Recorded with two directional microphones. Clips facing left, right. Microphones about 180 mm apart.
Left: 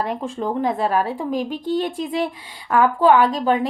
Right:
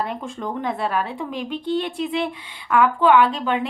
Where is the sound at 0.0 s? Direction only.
35° left (ahead or behind).